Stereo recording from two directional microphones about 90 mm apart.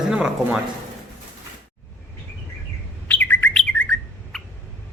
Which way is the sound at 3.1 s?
20° left (ahead or behind).